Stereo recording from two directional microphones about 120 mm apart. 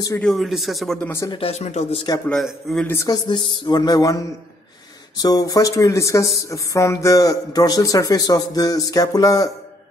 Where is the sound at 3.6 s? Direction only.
35° left (ahead or behind).